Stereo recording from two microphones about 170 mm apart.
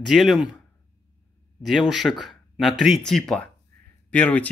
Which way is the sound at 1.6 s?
Centre (ahead or behind).